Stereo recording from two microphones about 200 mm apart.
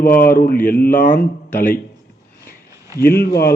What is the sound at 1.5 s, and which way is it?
Speech, 10° left (ahead or behind).